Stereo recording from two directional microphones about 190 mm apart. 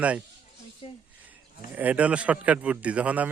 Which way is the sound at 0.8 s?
30° left (ahead or behind).